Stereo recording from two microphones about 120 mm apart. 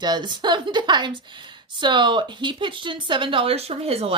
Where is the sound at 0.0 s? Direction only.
40° right (ahead or behind).